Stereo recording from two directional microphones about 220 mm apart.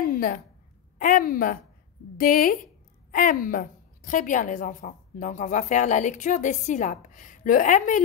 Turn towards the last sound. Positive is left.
turn(degrees=35)  # may be behind; listen again after turning